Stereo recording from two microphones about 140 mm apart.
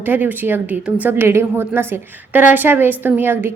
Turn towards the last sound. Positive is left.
turn(degrees=-15)  # may be behind; listen again after turning